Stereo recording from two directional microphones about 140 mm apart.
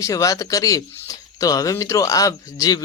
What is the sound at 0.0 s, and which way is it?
Speech, 25° left (ahead or behind).